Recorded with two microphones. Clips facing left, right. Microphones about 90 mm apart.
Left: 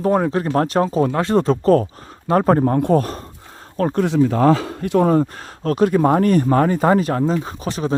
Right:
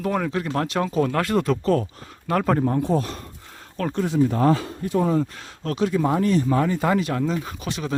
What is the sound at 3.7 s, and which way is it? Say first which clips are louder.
Speech: left 6 dB; 35° left (ahead or behind).